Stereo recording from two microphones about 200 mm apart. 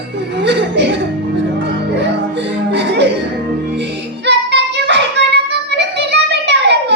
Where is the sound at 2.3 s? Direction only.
60° right (ahead or behind).